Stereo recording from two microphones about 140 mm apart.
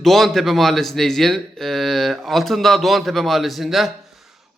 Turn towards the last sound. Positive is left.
turn(degrees=0)  # may be behind; listen again after turning